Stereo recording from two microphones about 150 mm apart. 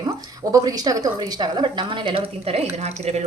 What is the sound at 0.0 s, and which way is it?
Speech, 25° right (ahead or behind).